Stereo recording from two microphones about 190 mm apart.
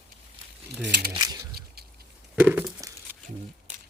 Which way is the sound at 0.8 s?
65° right (ahead or behind).